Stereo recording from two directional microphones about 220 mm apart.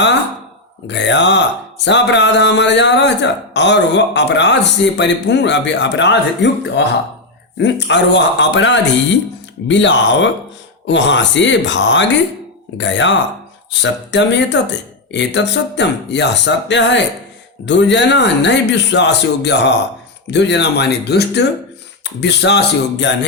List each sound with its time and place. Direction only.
0.9 s a man's voice: 55° left (ahead or behind)